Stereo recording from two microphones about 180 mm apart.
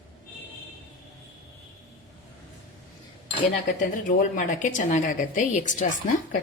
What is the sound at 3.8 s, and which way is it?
A woman's voice, 50° left (ahead or behind).